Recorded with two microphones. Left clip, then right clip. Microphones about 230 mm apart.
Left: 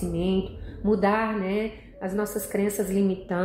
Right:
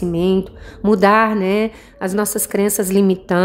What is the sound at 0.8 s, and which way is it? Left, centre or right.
A woman's voice, right.